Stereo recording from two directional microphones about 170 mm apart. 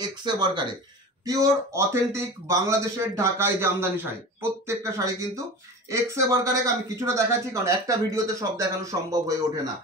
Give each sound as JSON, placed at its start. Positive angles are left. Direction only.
{"t": 0.0, "sound": "a man's voice", "side_deg": -25}